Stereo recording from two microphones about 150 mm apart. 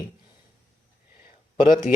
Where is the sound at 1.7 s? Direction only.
55° left (ahead or behind).